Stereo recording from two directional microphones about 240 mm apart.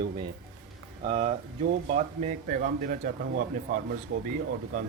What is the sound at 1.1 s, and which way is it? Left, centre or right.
A man's voice, right.